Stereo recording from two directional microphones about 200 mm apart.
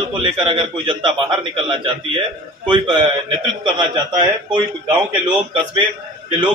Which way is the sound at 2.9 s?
25° right (ahead or behind).